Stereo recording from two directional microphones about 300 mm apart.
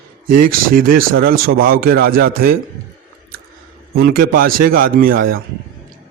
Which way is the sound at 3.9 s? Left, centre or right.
Right.